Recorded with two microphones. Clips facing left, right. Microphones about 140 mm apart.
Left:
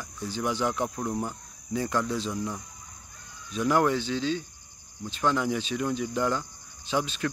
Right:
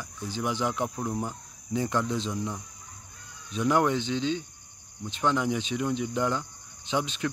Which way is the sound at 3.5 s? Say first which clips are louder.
Even; 20° right (ahead or behind).